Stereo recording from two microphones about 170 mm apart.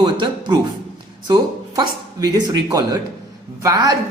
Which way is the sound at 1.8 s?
25° right (ahead or behind).